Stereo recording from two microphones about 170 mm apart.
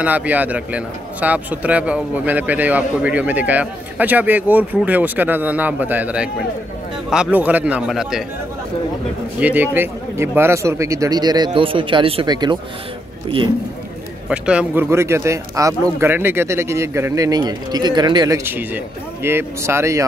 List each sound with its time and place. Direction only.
0.0 s a man's voice: 10° right (ahead or behind)
9.4 s a man's voice: 10° right (ahead or behind); by 12.5 s 25° right (ahead or behind)
14.3 s a man's voice: 5° right (ahead or behind)